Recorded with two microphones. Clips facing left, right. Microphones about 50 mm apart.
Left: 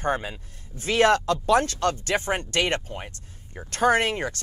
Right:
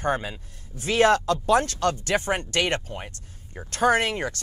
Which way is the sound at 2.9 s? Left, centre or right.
Centre.